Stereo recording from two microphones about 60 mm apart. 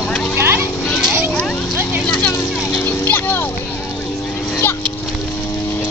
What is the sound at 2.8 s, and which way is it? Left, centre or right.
Vehicle, left.